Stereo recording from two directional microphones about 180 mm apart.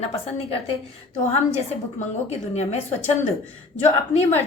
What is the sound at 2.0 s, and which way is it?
Speech, 40° left (ahead or behind).